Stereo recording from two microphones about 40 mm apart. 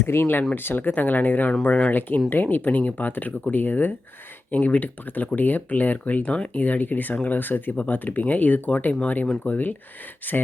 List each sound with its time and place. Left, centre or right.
0.0 s speech: left